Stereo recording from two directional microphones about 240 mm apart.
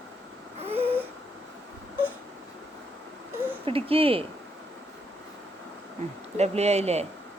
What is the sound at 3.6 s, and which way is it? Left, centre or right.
Speech, right.